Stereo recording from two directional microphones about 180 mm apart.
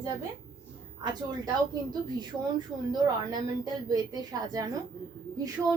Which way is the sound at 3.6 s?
20° right (ahead or behind).